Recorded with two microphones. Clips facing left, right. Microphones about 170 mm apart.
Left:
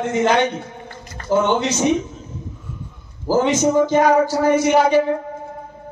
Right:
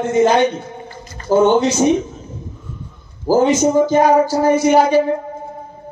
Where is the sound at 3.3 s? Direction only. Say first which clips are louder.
Right 3 dB; 35° right (ahead or behind).